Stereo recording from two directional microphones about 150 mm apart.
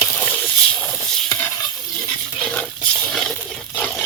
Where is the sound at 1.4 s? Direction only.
20° left (ahead or behind).